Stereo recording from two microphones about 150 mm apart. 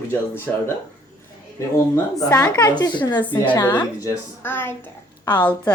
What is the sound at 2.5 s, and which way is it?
A woman's voice, 25° left (ahead or behind).